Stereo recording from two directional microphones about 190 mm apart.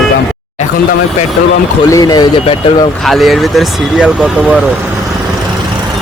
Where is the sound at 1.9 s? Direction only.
20° left (ahead or behind).